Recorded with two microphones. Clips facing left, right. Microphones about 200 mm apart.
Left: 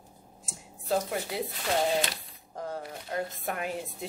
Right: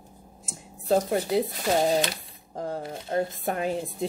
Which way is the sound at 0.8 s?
35° right (ahead or behind).